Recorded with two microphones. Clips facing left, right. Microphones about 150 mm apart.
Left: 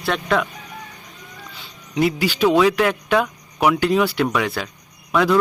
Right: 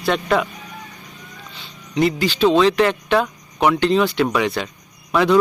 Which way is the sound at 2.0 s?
5° left (ahead or behind).